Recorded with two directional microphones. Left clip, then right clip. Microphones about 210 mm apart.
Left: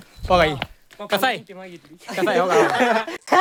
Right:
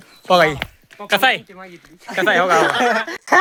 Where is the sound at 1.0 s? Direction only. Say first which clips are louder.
Right 5 dB; centre (ahead or behind).